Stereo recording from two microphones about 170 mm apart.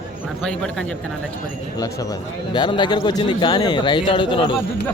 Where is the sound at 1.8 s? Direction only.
20° left (ahead or behind).